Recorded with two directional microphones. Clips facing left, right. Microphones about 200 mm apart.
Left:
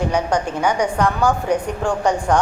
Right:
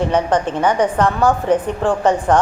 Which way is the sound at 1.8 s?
5° right (ahead or behind).